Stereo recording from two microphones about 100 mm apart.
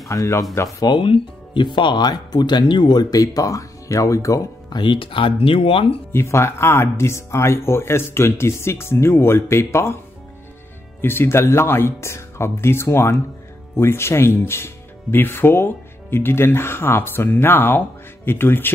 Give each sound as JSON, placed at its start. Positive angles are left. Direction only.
{"t": 0.1, "sound": "speech", "side_deg": 35}
{"t": 0.7, "sound": "speech", "side_deg": 50}
{"t": 4.6, "sound": "speech", "side_deg": 50}
{"t": 6.1, "sound": "speech", "side_deg": 25}
{"t": 11.0, "sound": "speech", "side_deg": 25}